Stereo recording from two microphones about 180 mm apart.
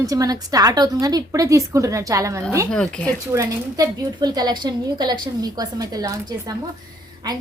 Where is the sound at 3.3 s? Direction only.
20° right (ahead or behind).